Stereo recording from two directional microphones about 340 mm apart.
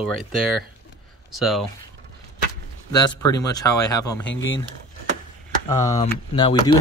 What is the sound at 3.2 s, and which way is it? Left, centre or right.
Speech, centre.